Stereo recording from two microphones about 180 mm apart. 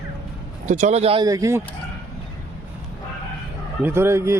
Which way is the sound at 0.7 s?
40° right (ahead or behind).